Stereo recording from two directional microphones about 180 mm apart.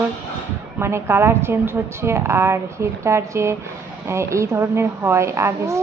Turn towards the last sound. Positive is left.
turn(degrees=-15)  # may be behind; listen again after turning